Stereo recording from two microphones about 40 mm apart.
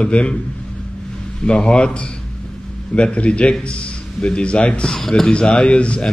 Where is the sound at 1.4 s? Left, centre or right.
Left.